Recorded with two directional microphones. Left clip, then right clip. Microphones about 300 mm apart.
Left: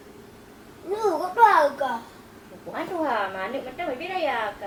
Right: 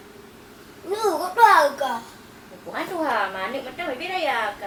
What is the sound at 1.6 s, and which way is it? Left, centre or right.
A woman's voice, left.